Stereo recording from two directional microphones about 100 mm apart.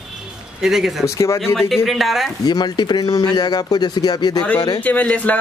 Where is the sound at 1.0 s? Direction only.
30° left (ahead or behind).